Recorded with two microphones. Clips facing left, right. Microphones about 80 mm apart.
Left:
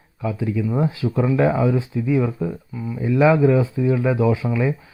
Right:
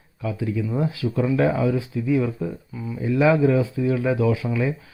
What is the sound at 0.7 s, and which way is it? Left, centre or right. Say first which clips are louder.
Speech: left 2 dB; left.